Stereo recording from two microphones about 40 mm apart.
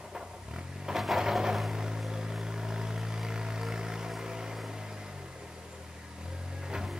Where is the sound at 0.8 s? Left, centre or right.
Centre.